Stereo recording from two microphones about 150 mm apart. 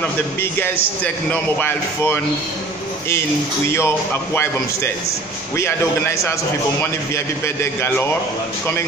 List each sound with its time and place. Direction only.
1.3 s speech: 10° left (ahead or behind)
3.7 s speech: 15° left (ahead or behind)
7.4 s speech: 15° left (ahead or behind)